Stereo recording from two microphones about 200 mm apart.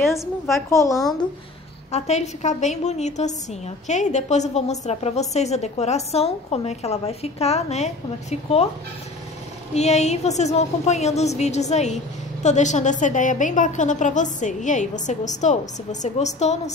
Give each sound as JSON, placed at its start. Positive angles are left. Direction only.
{"t": 0.2, "sound": "a woman's voice", "side_deg": 0}
{"t": 1.9, "sound": "a woman's voice", "side_deg": 35}
{"t": 9.8, "sound": "a woman's voice", "side_deg": 35}